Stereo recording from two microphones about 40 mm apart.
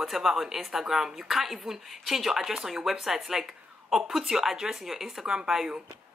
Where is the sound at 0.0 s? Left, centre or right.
Centre.